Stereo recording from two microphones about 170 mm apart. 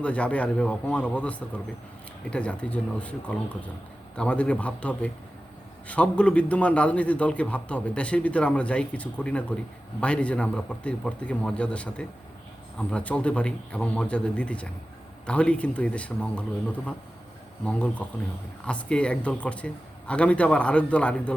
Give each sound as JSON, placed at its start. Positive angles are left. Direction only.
{"t": 0.0, "sound": "a man's voice", "side_deg": 5}